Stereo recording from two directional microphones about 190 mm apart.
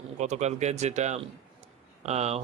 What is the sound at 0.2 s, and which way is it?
Speech, 35° right (ahead or behind).